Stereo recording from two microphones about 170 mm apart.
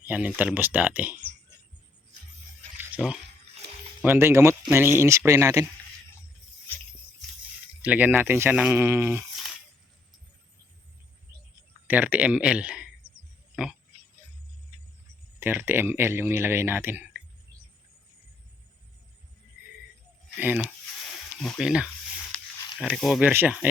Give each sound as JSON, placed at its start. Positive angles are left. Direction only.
{"t": 0.0, "sound": "speech", "side_deg": -5}
{"t": 4.0, "sound": "speech", "side_deg": -15}
{"t": 7.8, "sound": "speech", "side_deg": -10}
{"t": 11.9, "sound": "speech", "side_deg": -10}
{"t": 15.4, "sound": "speech", "side_deg": -10}
{"t": 20.3, "sound": "speech", "side_deg": -10}
{"t": 20.7, "sound": "a sound", "side_deg": 5}
{"t": 22.8, "sound": "speech", "side_deg": 0}